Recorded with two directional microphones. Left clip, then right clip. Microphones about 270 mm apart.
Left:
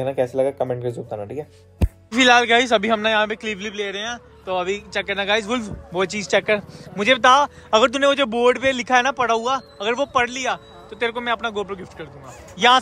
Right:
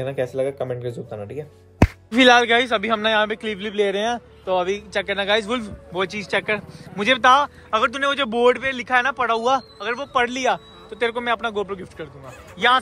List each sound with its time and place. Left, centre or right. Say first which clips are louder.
0.0 s a man's voice: left 3 dB; centre